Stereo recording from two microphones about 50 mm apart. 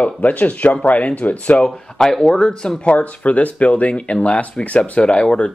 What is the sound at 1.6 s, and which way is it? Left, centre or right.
Speech, centre.